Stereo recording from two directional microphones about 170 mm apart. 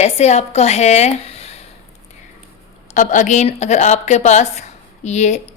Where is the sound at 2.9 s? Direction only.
50° left (ahead or behind).